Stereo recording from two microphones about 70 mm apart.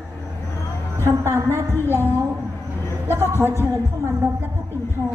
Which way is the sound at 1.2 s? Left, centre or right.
Right.